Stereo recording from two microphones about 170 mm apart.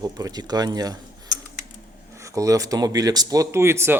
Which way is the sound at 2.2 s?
20° right (ahead or behind).